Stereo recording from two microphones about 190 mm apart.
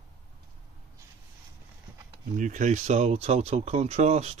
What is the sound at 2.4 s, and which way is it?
Speech, 40° right (ahead or behind).